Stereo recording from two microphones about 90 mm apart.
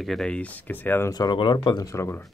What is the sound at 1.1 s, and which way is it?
Speech, 45° left (ahead or behind).